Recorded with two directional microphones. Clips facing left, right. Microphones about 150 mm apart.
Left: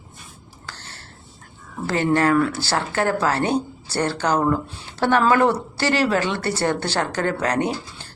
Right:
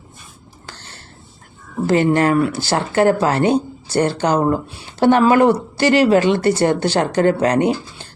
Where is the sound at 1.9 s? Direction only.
20° right (ahead or behind).